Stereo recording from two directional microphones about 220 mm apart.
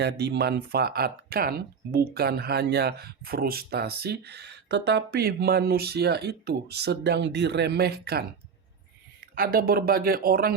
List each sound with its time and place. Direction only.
0.0 s speech: 50° right (ahead or behind)
9.3 s speech: 40° right (ahead or behind)